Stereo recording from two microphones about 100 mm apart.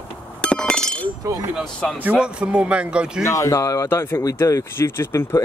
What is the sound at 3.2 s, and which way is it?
Speech, 30° left (ahead or behind).